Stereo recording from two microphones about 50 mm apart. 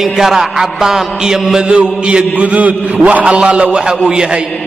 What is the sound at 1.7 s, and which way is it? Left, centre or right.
A man's voice, right.